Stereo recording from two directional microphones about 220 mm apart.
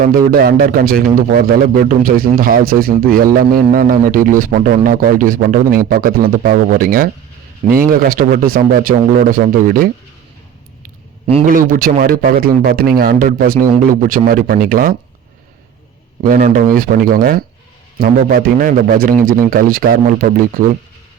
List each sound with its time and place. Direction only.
0.3 s a man's voice: 40° right (ahead or behind)
11.3 s a man's voice: 40° right (ahead or behind)
16.2 s a man's voice: 40° right (ahead or behind)